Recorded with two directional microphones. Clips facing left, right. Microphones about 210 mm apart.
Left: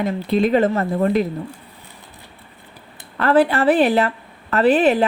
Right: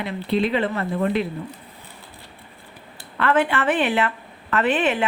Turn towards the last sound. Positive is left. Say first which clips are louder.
# left 6 dB
turn(degrees=35)  # may be behind; listen again after turning